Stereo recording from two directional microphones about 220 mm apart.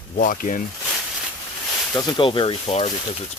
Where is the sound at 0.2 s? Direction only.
35° left (ahead or behind).